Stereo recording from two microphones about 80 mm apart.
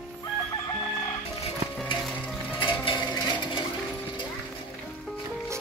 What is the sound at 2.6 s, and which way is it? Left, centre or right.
Music, left.